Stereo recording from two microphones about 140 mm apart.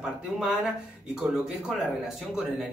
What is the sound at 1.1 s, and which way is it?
Speech, 5° right (ahead or behind).